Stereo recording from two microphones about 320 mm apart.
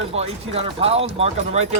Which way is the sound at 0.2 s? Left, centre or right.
Centre.